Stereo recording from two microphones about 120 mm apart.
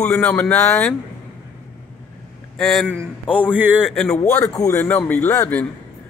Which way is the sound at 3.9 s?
5° left (ahead or behind).